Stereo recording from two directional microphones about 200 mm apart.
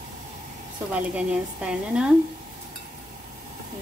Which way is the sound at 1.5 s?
5° right (ahead or behind).